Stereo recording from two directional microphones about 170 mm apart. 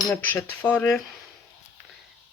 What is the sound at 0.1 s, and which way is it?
Cutlery, 10° left (ahead or behind).